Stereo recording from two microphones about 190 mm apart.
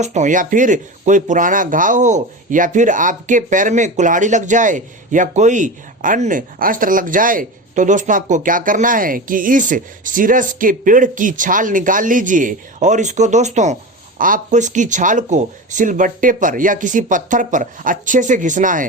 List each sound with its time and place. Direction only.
0.0 s speech: 40° right (ahead or behind)